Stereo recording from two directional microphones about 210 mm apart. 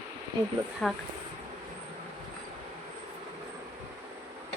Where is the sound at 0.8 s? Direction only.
Centre (ahead or behind).